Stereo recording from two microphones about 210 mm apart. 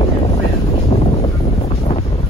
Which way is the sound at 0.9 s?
25° left (ahead or behind).